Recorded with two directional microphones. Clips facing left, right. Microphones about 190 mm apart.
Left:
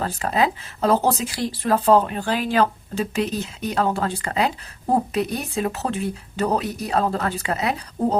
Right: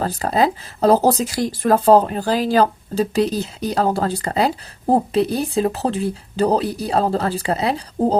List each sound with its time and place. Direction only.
0.0 s speech: 35° right (ahead or behind)